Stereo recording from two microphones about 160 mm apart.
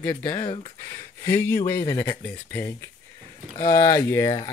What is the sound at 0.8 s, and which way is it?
Speech, 15° left (ahead or behind).